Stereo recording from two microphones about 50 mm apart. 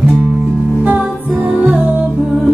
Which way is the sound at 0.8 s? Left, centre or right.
Right.